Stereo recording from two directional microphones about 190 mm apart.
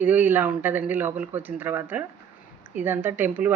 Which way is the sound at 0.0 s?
10° right (ahead or behind).